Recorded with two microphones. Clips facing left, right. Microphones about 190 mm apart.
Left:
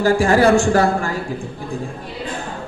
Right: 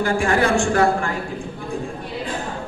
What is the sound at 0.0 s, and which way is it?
A man's voice, 35° left (ahead or behind).